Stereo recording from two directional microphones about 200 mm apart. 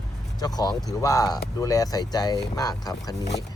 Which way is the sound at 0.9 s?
15° left (ahead or behind).